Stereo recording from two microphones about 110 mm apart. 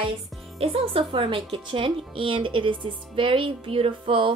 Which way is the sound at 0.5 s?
60° right (ahead or behind).